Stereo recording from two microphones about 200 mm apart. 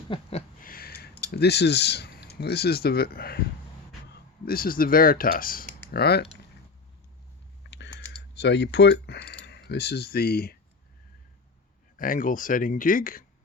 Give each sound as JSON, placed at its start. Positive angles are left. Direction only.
{"t": 0.1, "sound": "a sound", "side_deg": 30}
{"t": 0.6, "sound": "a sound", "side_deg": 50}
{"t": 1.3, "sound": "speech", "side_deg": 55}
{"t": 7.7, "sound": "typing", "side_deg": 60}
{"t": 8.4, "sound": "speech", "side_deg": 60}
{"t": 11.9, "sound": "speech", "side_deg": 45}